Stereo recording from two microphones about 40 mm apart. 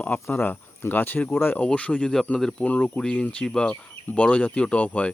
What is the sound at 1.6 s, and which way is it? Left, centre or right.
Speech, left.